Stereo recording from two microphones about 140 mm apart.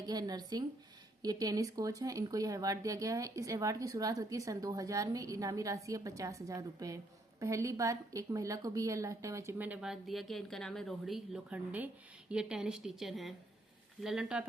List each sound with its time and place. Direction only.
0.0 s speech: 30° right (ahead or behind); by 14.4 s 5° right (ahead or behind)